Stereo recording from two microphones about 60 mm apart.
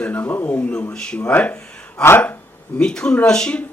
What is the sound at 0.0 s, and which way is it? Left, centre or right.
Speech, left.